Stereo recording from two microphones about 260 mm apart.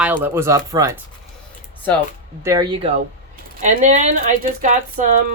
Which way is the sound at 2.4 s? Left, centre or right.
Centre.